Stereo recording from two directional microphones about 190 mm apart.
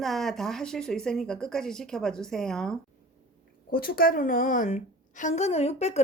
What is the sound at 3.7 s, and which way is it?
A woman's voice, 50° left (ahead or behind).